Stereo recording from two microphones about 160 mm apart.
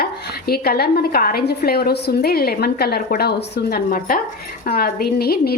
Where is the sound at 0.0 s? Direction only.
75° left (ahead or behind).